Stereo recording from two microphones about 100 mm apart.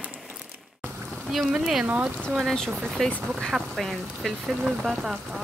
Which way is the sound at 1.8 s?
15° right (ahead or behind).